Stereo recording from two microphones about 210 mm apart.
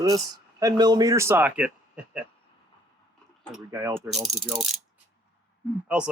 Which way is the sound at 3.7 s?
15° right (ahead or behind).